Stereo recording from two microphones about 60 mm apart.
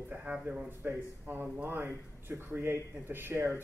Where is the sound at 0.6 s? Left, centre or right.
Right.